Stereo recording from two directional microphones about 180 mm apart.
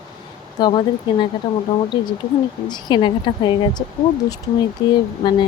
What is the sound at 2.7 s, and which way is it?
Speech, 25° left (ahead or behind).